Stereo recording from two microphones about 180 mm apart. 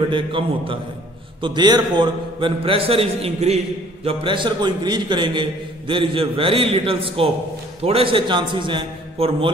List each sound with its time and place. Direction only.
0.1 s a man's voice: 30° right (ahead or behind)